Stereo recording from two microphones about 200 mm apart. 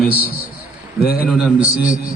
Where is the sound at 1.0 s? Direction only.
50° left (ahead or behind).